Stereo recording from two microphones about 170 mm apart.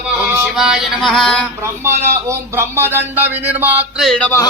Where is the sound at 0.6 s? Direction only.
5° right (ahead or behind).